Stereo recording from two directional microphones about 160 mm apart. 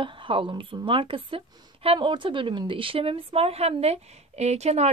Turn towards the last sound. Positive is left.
turn(degrees=-45)  # may be behind; listen again after turning